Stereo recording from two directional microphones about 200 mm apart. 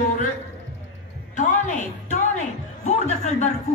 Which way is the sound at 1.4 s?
40° left (ahead or behind).